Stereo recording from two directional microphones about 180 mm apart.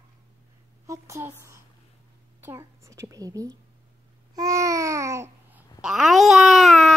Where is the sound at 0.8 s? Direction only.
15° right (ahead or behind).